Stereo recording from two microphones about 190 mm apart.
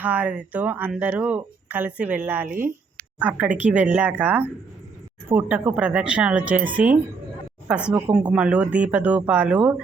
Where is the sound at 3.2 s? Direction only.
10° right (ahead or behind).